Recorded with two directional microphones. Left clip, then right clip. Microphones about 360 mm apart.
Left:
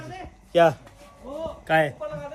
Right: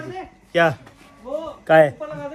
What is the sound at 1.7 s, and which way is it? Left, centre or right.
Speech, centre.